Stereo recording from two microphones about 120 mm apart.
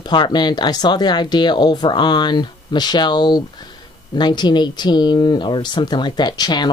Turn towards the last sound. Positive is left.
turn(degrees=35)  # may be behind; listen again after turning